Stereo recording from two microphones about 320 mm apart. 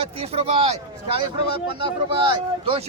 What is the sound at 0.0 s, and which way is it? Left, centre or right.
Speech, centre.